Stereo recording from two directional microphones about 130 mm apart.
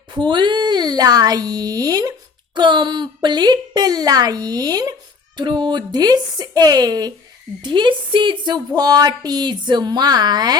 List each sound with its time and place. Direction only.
0.1 s a woman's voice: 35° right (ahead or behind)